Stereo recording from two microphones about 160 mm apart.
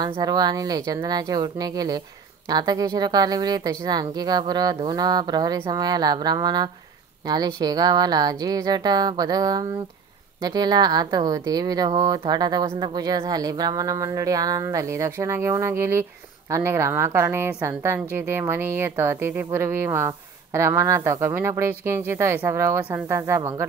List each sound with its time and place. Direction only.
0.0 s speech: 25° right (ahead or behind)